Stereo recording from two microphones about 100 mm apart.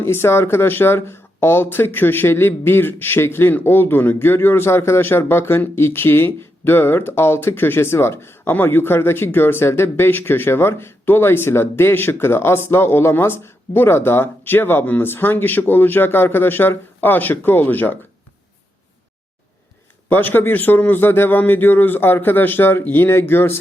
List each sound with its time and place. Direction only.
0.0 s speech: 25° left (ahead or behind)
20.1 s speech: 20° left (ahead or behind)